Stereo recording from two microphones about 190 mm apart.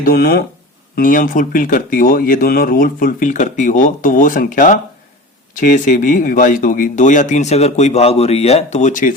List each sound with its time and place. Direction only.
0.0 s speech: 55° left (ahead or behind)